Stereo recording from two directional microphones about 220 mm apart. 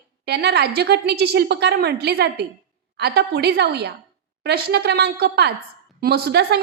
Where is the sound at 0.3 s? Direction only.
45° right (ahead or behind).